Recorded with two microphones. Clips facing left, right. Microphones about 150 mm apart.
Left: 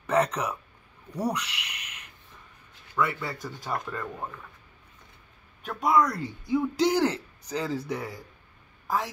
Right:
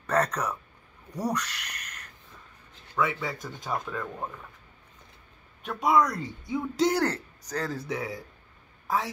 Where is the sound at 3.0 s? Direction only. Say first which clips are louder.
Even; 10° right (ahead or behind).